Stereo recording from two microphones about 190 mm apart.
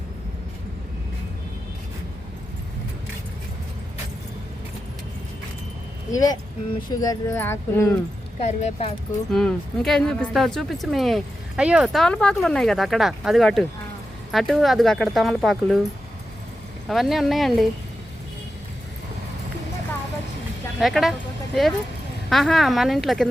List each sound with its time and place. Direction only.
6.1 s speech: 20° left (ahead or behind)
8.4 s speech: 35° left (ahead or behind)
9.3 s speech: centre (ahead or behind)
16.9 s speech: centre (ahead or behind)
20.7 s speech: centre (ahead or behind)